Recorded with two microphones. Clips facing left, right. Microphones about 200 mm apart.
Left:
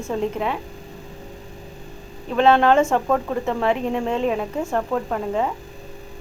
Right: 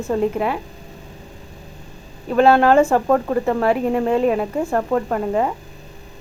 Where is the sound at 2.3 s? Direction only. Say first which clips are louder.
Right 3 dB; 5° right (ahead or behind).